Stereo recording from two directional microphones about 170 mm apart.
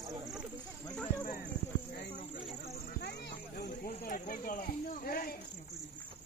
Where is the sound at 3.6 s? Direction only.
55° left (ahead or behind).